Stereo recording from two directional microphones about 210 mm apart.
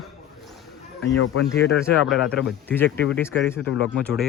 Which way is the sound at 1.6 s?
55° left (ahead or behind).